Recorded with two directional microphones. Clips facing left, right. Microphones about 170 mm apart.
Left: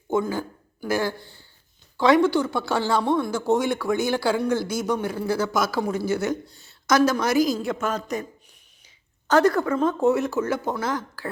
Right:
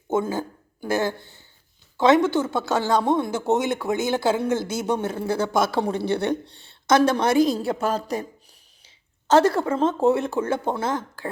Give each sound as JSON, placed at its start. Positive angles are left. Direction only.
{"t": 0.1, "sound": "a woman's voice", "side_deg": -20}